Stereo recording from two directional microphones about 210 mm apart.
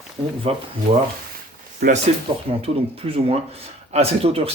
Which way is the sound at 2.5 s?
25° right (ahead or behind).